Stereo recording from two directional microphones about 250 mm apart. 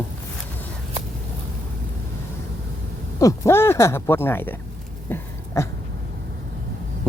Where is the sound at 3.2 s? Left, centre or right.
Centre.